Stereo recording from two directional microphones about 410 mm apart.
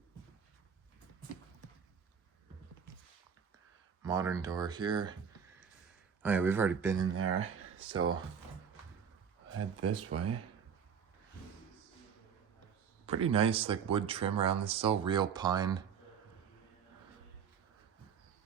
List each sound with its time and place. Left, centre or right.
4.0 s speech: centre
6.2 s speech: centre
7.0 s speech: right
9.6 s speech: right
13.1 s speech: centre